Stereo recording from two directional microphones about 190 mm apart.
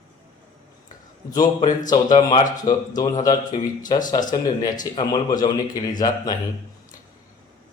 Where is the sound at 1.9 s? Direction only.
20° left (ahead or behind).